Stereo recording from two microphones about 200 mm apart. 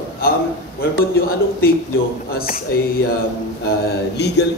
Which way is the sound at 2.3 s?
45° left (ahead or behind).